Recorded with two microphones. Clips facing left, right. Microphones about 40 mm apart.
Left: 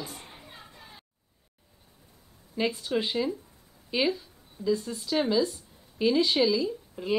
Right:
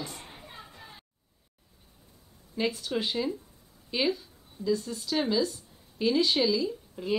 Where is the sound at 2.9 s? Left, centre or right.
Centre.